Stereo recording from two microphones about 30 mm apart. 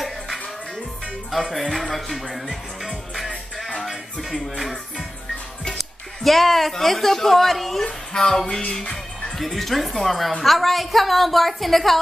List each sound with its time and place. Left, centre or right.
1.5 s a woman's voice: centre
2.8 s music: centre
5.8 s music: centre
6.7 s a woman's voice: centre
8.1 s music: left
9.4 s a woman's voice: centre